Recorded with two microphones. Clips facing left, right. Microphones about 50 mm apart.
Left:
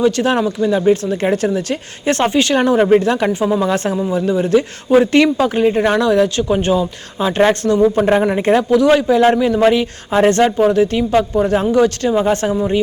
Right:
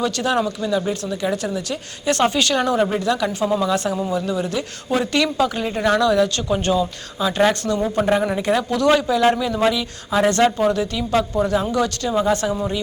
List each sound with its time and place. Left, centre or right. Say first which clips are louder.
0.0 s speech: left 6 dB; left
8.7 s speech: left 5 dB; centre; by 12.5 s left